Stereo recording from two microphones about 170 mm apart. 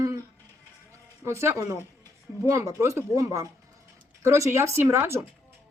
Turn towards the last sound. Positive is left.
turn(degrees=-15)  # may be behind; listen again after turning